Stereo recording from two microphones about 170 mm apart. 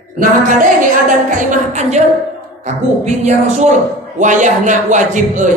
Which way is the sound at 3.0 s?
45° right (ahead or behind).